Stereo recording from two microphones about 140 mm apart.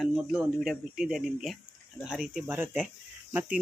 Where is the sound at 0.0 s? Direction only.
5° right (ahead or behind).